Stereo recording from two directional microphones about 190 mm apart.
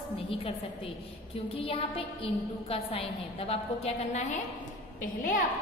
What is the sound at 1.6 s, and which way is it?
A woman's voice, 30° left (ahead or behind).